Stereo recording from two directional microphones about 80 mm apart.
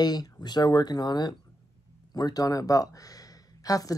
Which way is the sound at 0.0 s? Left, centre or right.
Left.